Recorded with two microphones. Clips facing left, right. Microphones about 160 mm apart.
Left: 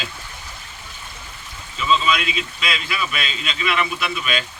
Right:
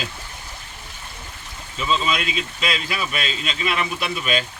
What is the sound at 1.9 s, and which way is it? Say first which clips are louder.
Speech: left 3 dB; 40° right (ahead or behind).